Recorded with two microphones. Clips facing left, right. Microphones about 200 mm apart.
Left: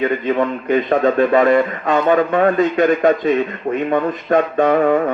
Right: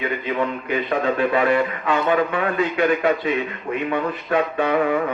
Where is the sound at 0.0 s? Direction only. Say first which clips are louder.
Left 6 dB; 45° left (ahead or behind).